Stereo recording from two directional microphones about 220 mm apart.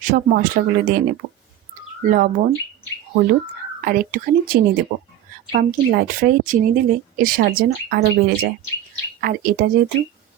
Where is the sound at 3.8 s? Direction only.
40° right (ahead or behind).